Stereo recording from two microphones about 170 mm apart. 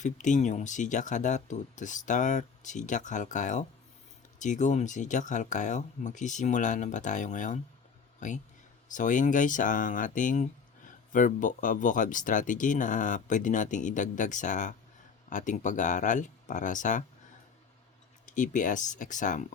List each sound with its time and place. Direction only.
0.0 s speech: 45° left (ahead or behind)
18.3 s speech: 50° left (ahead or behind)